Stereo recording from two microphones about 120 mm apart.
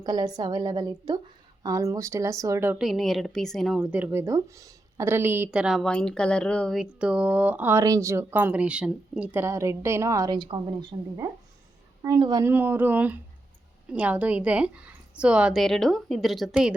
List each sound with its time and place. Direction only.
0.0 s a woman's voice: 35° right (ahead or behind)
2.7 s a woman's voice: centre (ahead or behind)
3.8 s speech: 10° right (ahead or behind)
5.5 s speech: 5° right (ahead or behind)
6.7 s speech: 10° right (ahead or behind); by 10.3 s 25° right (ahead or behind)
10.3 s a woman's voice: 40° right (ahead or behind)
12.2 s a woman's voice: 35° right (ahead or behind)
12.5 s speech: 15° right (ahead or behind)